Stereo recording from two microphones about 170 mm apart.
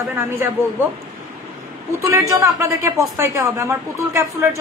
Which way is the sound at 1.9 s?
20° right (ahead or behind).